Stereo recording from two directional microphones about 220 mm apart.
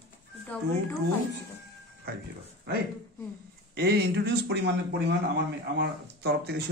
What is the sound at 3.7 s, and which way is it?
Speech, 45° right (ahead or behind).